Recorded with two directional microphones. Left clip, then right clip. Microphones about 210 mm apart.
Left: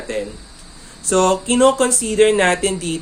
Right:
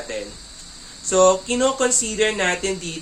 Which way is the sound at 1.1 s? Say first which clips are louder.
Even; 50° left (ahead or behind).